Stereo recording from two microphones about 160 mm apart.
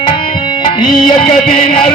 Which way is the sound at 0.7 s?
30° left (ahead or behind).